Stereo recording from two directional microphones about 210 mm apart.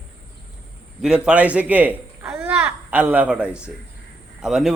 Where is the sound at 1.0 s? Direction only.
5° right (ahead or behind).